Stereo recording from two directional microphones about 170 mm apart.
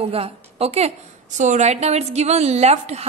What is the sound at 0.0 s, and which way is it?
A woman's voice, 35° right (ahead or behind).